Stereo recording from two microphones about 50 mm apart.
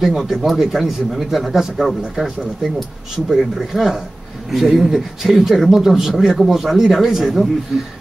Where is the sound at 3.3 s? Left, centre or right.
Centre.